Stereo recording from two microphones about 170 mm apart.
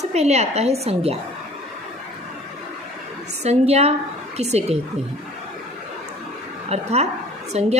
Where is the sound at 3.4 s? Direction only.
40° right (ahead or behind).